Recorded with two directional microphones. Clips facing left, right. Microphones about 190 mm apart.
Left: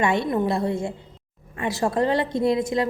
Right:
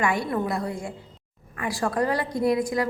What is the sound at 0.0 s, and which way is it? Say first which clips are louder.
A woman's voice: left 3 dB; 25° left (ahead or behind).